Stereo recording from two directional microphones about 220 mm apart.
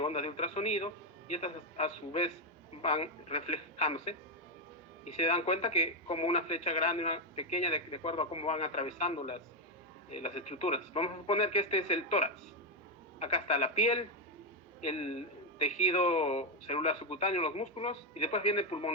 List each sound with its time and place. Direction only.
0.0 s a man's voice: 25° left (ahead or behind)
5.1 s a man's voice: 30° left (ahead or behind)